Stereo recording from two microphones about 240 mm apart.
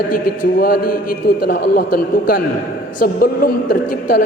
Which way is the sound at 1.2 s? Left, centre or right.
Left.